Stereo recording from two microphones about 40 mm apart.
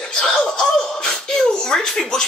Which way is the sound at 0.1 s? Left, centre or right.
Centre.